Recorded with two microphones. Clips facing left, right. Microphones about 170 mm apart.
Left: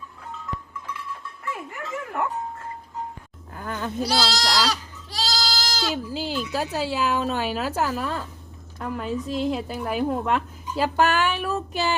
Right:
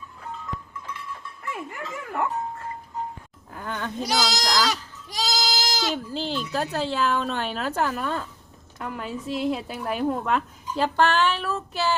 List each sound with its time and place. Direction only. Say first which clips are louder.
1.5 s speech: even; centre (ahead or behind)
3.5 s speech: left 1 dB; 5° left (ahead or behind)
4.0 s goat: left 1 dB; 20° right (ahead or behind)
5.9 s a woman's voice: left 1 dB; 5° left (ahead or behind)